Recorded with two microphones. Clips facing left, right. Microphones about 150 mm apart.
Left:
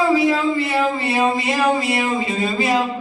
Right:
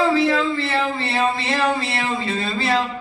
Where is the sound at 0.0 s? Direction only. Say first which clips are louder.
Left 1 dB; 10° left (ahead or behind).